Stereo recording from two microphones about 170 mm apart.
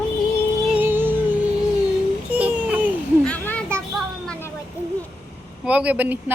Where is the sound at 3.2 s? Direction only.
10° left (ahead or behind).